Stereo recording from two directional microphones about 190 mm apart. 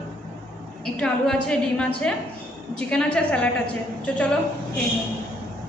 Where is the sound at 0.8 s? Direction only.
5° left (ahead or behind).